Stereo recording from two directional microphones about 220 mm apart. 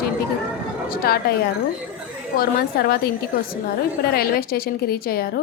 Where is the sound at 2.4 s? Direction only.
45° left (ahead or behind).